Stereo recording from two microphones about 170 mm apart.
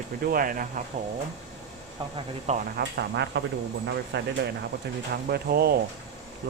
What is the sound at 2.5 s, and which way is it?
Speech, 45° right (ahead or behind).